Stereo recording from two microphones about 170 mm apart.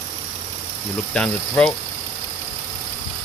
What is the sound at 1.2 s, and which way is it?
Speech, 5° left (ahead or behind).